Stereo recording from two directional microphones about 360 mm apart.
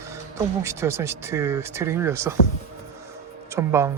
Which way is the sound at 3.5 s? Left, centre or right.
Centre.